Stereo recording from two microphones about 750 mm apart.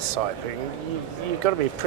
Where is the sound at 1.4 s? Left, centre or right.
Right.